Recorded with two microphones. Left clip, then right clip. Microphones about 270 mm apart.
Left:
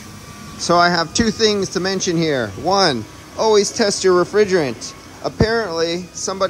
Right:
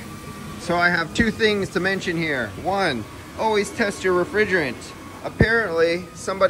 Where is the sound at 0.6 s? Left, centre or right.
Centre.